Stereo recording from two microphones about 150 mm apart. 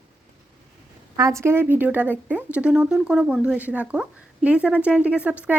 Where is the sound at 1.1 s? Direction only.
20° right (ahead or behind).